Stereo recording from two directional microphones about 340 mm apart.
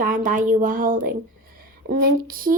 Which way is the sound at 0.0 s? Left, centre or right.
Right.